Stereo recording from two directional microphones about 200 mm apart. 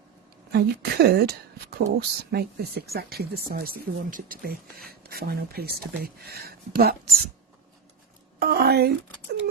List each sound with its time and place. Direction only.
0.5 s speech: 50° right (ahead or behind)
8.4 s speech: 50° right (ahead or behind)